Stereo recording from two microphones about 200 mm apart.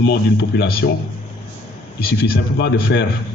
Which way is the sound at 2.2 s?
60° left (ahead or behind).